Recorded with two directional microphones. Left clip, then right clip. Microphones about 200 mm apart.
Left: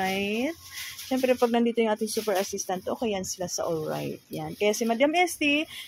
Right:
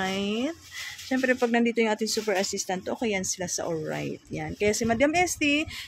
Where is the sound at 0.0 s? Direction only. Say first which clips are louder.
Left 1 dB; 5° right (ahead or behind).